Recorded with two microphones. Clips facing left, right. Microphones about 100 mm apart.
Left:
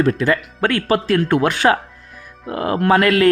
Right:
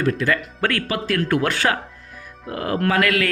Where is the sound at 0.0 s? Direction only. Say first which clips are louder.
Left 4 dB; 25° left (ahead or behind).